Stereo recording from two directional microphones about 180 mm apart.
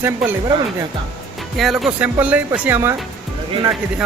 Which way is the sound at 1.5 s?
Centre (ahead or behind).